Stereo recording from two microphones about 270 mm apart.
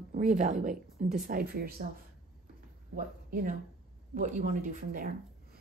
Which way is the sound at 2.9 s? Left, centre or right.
Right.